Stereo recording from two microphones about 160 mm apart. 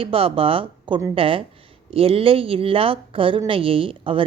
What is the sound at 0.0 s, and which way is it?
Speech, 35° right (ahead or behind).